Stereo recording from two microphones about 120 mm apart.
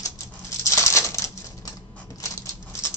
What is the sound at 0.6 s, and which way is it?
Patter, 25° left (ahead or behind).